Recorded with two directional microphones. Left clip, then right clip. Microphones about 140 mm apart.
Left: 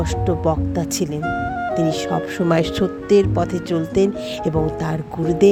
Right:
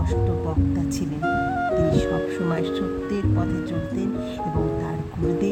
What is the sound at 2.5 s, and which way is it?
Speech, 90° left.